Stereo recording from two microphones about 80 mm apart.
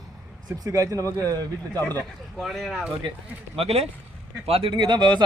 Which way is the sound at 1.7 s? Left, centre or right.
Left.